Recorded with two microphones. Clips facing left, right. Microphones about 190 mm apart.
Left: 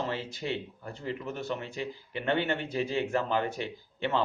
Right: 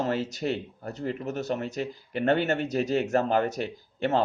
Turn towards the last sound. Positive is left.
turn(degrees=-40)  # may be behind; listen again after turning